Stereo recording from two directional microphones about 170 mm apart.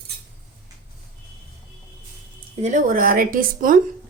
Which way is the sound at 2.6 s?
50° right (ahead or behind).